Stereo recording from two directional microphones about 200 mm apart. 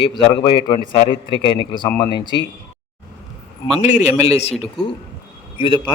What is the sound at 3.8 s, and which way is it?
A man's voice, 35° left (ahead or behind).